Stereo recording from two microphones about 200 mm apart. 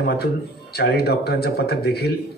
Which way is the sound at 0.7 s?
55° left (ahead or behind).